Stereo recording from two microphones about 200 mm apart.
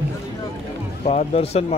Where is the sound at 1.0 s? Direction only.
30° left (ahead or behind).